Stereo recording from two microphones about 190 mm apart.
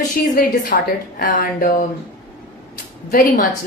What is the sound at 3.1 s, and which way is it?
Speech, 50° left (ahead or behind).